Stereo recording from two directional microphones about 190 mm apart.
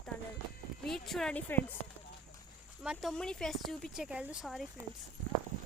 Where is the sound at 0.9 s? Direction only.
Centre (ahead or behind).